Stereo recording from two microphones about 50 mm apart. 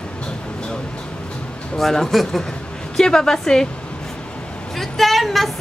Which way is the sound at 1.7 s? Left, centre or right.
Centre.